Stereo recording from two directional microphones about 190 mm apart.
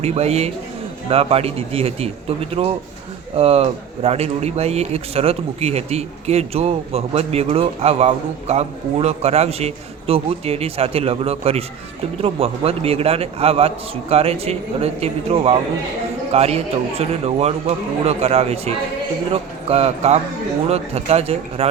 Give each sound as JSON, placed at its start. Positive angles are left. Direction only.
{"t": 0.0, "sound": "speech", "side_deg": -35}